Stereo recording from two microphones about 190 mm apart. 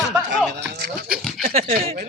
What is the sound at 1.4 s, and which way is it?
Speech, 35° right (ahead or behind).